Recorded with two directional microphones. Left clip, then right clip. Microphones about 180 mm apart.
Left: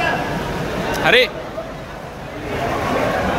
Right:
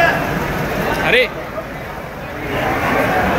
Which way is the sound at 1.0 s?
15° left (ahead or behind).